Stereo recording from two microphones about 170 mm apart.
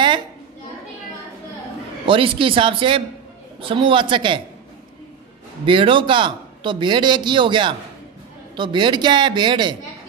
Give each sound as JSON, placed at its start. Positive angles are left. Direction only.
{"t": 2.0, "sound": "a man's voice", "side_deg": -30}
{"t": 5.7, "sound": "a man's voice", "side_deg": -30}